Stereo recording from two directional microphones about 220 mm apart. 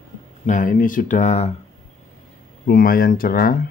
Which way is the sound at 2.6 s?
40° left (ahead or behind).